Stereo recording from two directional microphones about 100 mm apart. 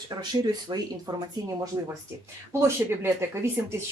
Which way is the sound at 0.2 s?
45° right (ahead or behind).